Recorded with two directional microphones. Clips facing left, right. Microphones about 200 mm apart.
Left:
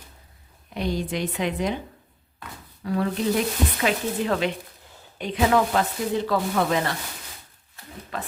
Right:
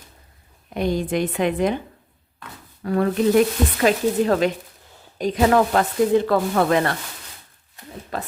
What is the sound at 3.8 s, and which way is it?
Speech, 40° right (ahead or behind).